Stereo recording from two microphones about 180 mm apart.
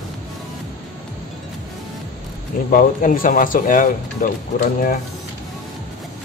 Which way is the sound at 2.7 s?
50° left (ahead or behind).